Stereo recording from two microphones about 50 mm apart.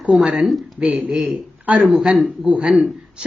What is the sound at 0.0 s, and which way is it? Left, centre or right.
Speech, centre.